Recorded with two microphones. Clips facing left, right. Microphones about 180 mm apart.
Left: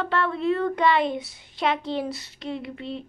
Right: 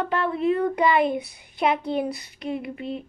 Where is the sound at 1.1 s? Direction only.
55° right (ahead or behind).